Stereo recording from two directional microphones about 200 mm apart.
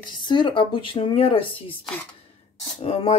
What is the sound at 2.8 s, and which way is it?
Speech, 30° left (ahead or behind).